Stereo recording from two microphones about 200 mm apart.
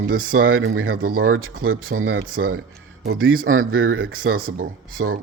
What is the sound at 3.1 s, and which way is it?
Speech, 90° right.